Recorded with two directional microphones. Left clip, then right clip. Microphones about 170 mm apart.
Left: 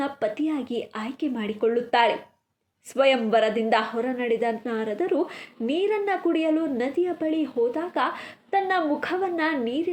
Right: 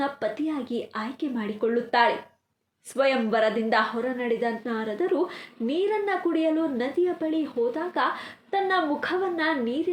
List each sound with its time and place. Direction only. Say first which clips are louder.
0.0 s a woman's voice: left 1 dB; 35° left (ahead or behind)